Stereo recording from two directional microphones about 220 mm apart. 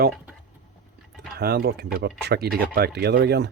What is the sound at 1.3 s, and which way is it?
Speech, 45° right (ahead or behind).